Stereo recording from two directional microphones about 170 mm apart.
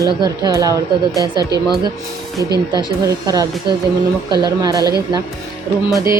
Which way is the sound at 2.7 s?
25° right (ahead or behind).